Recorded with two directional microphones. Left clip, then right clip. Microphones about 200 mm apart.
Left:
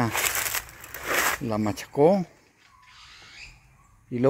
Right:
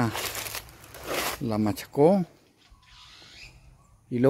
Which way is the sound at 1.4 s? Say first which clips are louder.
Left 1 dB; 5° right (ahead or behind).